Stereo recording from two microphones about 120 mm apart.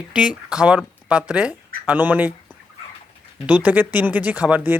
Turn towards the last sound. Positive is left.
turn(degrees=-15)  # may be behind; listen again after turning